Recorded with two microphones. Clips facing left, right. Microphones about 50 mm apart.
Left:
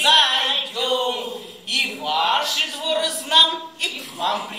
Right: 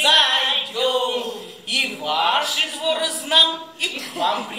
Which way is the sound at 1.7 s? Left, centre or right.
Centre.